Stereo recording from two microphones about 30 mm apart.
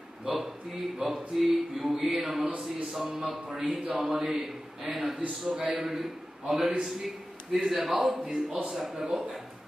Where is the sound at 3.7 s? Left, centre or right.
Right.